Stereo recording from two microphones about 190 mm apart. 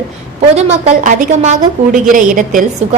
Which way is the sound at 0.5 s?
35° right (ahead or behind).